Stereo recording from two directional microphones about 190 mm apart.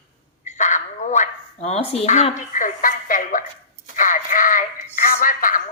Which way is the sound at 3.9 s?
45° left (ahead or behind).